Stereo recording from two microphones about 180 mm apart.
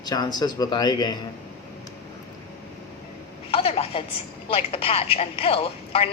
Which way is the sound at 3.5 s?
30° left (ahead or behind).